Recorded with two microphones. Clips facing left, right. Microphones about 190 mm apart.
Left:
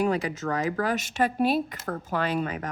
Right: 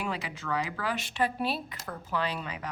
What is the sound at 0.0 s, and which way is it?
Speech, 45° left (ahead or behind).